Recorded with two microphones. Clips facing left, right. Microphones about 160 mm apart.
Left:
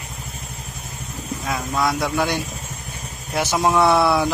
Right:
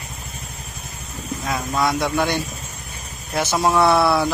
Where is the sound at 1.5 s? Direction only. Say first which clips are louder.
Right 1 dB; centre (ahead or behind).